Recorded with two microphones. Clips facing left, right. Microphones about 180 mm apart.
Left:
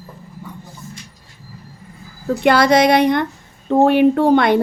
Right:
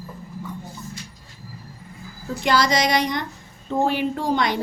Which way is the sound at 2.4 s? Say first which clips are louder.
Left 7 dB; 60° left (ahead or behind).